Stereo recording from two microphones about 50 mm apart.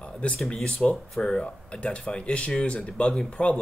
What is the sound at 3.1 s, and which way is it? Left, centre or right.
Speech, centre.